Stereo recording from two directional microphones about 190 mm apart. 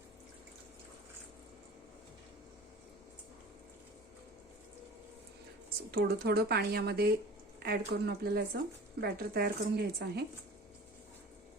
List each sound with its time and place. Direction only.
5.9 s speech: 55° right (ahead or behind)